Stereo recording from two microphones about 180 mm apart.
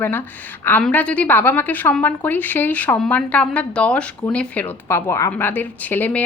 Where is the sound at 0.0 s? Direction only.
10° left (ahead or behind).